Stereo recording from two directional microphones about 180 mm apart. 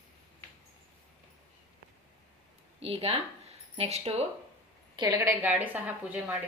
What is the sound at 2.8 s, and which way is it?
Speech, 35° right (ahead or behind).